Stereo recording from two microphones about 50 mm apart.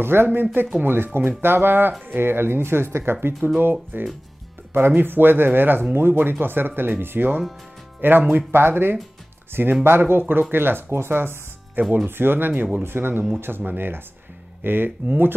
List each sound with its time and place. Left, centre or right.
0.0 s speech: right